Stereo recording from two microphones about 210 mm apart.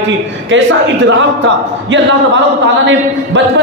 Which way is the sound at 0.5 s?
60° right (ahead or behind).